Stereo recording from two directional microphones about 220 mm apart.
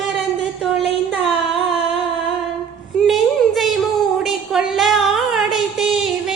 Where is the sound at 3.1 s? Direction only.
Centre (ahead or behind).